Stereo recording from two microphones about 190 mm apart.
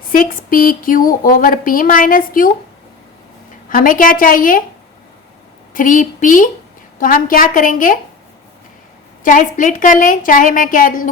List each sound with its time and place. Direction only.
0.1 s speech: 50° left (ahead or behind)
3.7 s speech: 45° left (ahead or behind)
5.7 s speech: 45° left (ahead or behind)
9.2 s speech: 45° left (ahead or behind)